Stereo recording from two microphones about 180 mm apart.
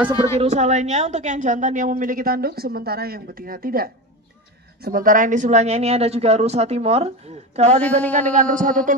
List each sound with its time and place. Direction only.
0.4 s a woman's voice: 35° right (ahead or behind)